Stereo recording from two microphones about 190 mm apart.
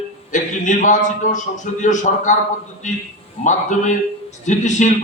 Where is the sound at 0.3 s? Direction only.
40° left (ahead or behind).